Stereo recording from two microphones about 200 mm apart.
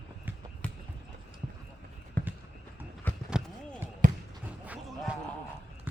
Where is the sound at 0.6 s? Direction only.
5° left (ahead or behind).